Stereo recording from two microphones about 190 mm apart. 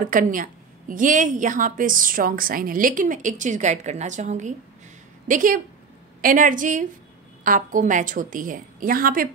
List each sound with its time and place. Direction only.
0.1 s a woman's voice: 45° right (ahead or behind)